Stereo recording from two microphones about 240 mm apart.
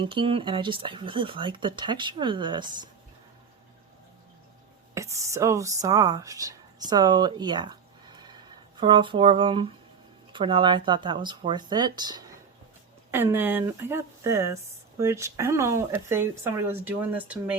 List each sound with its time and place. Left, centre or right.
0.0 s speech: right
4.9 s speech: centre